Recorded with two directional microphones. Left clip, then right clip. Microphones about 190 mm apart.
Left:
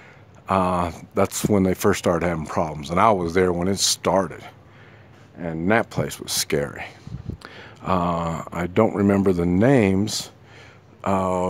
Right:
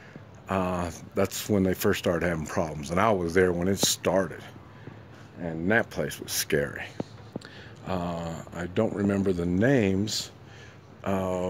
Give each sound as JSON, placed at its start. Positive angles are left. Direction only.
{"t": 0.5, "sound": "speech", "side_deg": 30}
{"t": 7.4, "sound": "speech", "side_deg": 40}